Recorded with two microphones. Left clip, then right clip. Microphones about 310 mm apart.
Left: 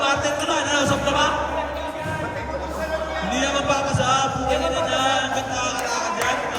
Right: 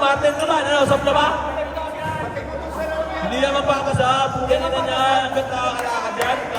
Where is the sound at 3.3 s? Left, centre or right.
Centre.